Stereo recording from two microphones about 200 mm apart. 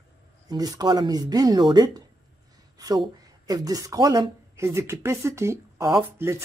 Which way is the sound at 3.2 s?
20° right (ahead or behind).